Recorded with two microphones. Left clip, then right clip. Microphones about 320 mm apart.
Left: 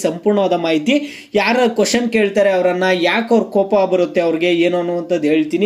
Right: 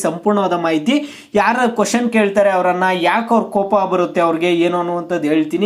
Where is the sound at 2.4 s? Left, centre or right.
Centre.